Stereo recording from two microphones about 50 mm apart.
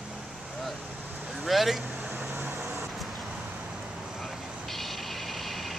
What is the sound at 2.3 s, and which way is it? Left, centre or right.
Vehicle, right.